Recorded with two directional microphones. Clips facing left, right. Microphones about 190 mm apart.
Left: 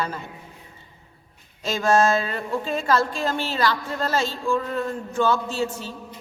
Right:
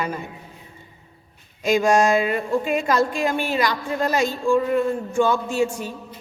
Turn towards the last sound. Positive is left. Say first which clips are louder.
# right 4 dB
turn(degrees=-15)  # may be behind; listen again after turning